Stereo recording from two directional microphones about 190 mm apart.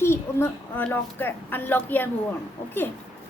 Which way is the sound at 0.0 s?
15° left (ahead or behind).